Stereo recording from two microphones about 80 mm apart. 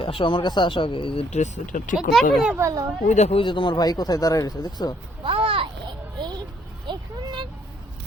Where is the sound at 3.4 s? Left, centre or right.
Left.